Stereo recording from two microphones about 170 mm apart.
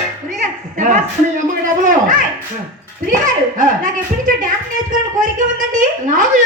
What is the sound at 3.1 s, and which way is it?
A woman's voice, 50° right (ahead or behind).